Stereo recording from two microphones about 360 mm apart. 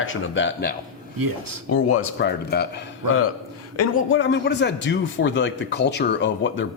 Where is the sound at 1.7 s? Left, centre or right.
Left.